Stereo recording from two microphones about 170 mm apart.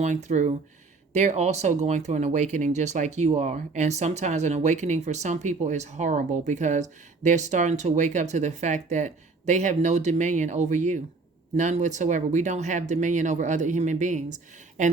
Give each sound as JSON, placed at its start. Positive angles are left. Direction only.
{"t": 0.0, "sound": "speech", "side_deg": -45}